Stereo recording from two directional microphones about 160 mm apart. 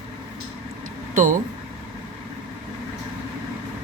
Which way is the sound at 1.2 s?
55° right (ahead or behind).